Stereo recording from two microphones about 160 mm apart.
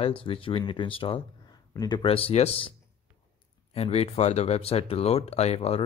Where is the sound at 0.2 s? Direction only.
35° left (ahead or behind).